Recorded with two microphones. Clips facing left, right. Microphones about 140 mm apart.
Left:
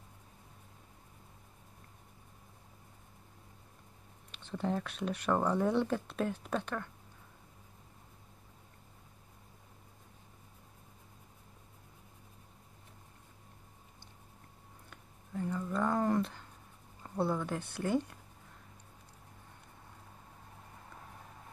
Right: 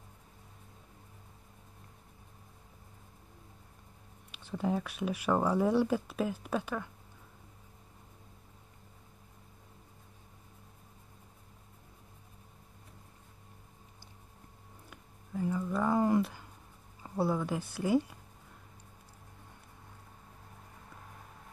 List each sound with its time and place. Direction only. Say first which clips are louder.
4.3 s speech: right 2 dB; 10° right (ahead or behind)
14.9 s a sound: right 3 dB; 5° right (ahead or behind)
17.7 s speech: right 4 dB; 5° right (ahead or behind)